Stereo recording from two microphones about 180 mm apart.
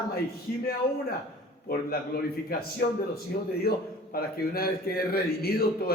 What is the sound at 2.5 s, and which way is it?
A man's voice, 55° left (ahead or behind).